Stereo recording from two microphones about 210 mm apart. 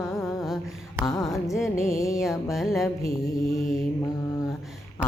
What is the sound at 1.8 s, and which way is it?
Music, 15° left (ahead or behind).